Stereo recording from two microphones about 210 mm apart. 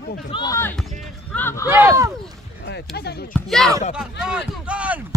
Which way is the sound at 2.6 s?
50° left (ahead or behind).